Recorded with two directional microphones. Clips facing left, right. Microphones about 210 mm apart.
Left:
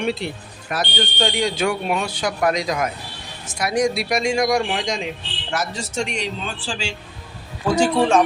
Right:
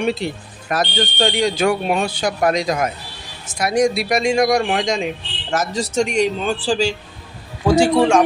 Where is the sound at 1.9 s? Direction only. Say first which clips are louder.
Right 3 dB; 30° right (ahead or behind).